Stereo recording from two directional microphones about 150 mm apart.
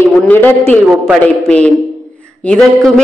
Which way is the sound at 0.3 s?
15° left (ahead or behind).